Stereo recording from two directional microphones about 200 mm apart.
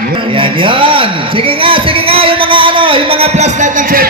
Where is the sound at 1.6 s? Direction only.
25° right (ahead or behind).